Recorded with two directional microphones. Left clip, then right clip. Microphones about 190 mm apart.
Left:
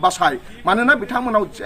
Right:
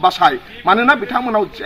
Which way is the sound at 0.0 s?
30° left (ahead or behind).